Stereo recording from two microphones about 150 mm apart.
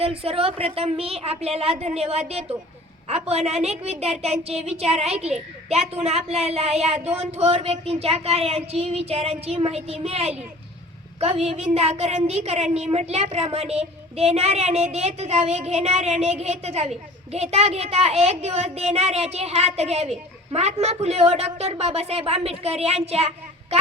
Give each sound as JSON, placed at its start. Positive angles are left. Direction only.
{"t": 0.0, "sound": "a woman's voice", "side_deg": -40}